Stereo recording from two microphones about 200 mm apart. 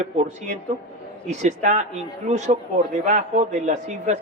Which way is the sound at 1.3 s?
35° right (ahead or behind).